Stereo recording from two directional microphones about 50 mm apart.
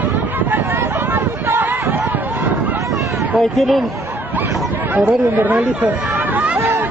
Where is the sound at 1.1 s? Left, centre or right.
Right.